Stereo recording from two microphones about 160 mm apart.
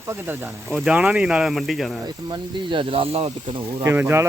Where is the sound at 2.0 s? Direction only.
25° right (ahead or behind).